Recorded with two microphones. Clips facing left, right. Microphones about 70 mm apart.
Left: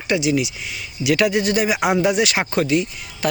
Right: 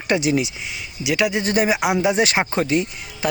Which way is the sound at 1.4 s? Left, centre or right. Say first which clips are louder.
Even; right.